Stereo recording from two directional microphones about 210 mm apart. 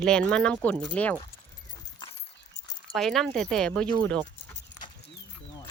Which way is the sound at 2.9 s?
Centre (ahead or behind).